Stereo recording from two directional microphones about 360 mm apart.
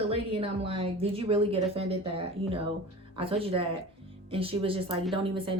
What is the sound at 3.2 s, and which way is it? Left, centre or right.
A woman's voice, centre.